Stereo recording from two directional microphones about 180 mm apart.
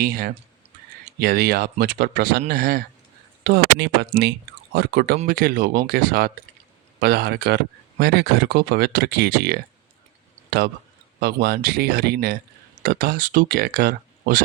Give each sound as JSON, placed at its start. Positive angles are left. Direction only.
{"t": 0.0, "sound": "speech", "side_deg": -55}
{"t": 11.2, "sound": "speech", "side_deg": -60}